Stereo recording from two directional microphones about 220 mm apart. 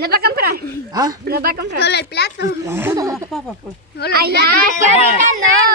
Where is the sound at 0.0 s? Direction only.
45° right (ahead or behind).